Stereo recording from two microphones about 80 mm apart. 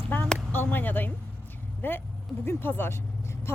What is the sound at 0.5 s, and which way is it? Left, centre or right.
Speech, left.